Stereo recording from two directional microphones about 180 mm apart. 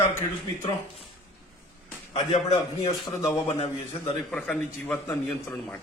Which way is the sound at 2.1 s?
35° left (ahead or behind).